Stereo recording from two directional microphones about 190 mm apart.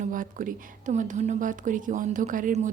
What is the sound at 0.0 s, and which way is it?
A woman's voice, 45° right (ahead or behind).